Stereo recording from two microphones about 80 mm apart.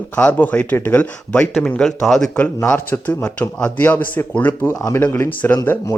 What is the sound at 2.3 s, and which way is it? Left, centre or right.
Speech, left.